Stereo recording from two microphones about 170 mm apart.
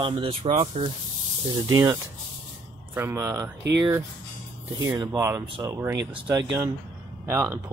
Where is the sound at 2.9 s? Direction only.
15° right (ahead or behind).